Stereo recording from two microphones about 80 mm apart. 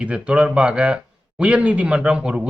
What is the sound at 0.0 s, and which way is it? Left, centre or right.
Speech, centre.